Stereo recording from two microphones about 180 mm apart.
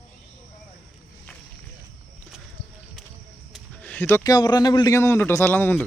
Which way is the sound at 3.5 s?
5° left (ahead or behind).